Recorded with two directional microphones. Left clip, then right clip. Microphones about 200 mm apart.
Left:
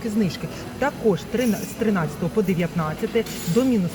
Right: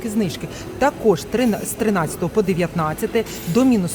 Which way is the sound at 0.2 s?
25° right (ahead or behind).